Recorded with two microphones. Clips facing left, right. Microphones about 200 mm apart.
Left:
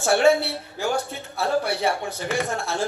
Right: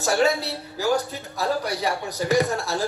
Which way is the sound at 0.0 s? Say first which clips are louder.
Left 3 dB; 40° right (ahead or behind).